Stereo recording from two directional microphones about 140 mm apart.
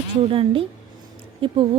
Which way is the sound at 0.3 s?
40° right (ahead or behind).